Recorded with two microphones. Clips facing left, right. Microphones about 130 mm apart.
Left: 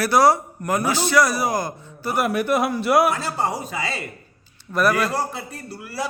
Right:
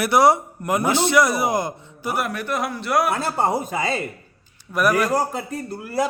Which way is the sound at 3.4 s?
50° right (ahead or behind).